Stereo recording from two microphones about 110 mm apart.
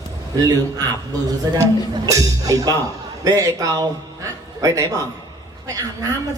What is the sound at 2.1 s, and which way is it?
A man's voice, 35° right (ahead or behind).